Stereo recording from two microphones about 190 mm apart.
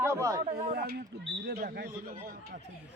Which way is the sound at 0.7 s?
55° right (ahead or behind).